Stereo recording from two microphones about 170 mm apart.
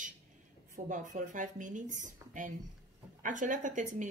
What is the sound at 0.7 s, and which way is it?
Speech, 50° right (ahead or behind).